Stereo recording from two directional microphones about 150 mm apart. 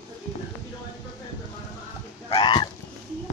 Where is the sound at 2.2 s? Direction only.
30° left (ahead or behind).